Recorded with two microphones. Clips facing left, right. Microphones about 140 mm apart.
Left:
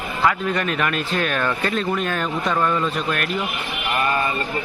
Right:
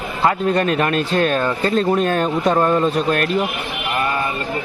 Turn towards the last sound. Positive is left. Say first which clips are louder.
# right 6 dB
turn(degrees=-35)  # may be behind; listen again after turning